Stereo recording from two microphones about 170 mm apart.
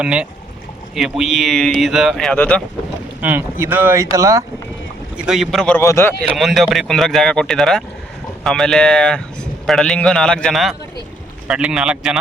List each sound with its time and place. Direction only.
0.0 s a man's voice: 5° right (ahead or behind)
3.2 s speech: 10° right (ahead or behind)
5.1 s a man's voice: 5° right (ahead or behind)
5.8 s speech: 15° left (ahead or behind)
6.2 s a man's voice: centre (ahead or behind)